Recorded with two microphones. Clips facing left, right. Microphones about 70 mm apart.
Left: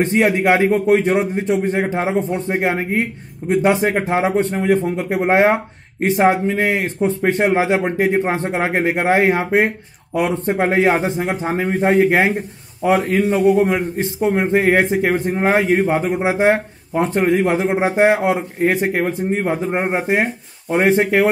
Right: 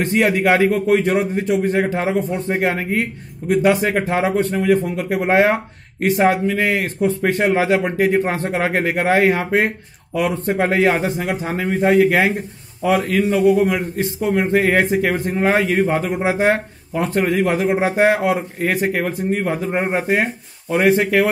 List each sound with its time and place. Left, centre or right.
0.0 s a man's voice: left